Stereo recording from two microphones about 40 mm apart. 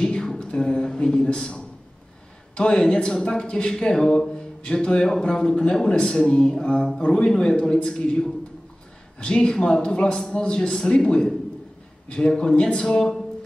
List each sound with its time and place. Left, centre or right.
0.0 s a sound: centre
0.6 s a man's voice: centre
2.5 s a man's voice: left